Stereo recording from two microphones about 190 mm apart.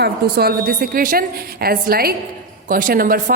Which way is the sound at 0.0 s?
55° right (ahead or behind).